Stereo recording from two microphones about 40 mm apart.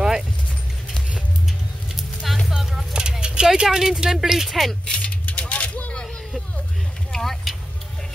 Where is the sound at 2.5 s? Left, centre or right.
Centre.